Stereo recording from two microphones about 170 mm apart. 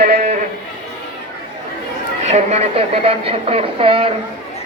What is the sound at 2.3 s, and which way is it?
Speech, 40° right (ahead or behind).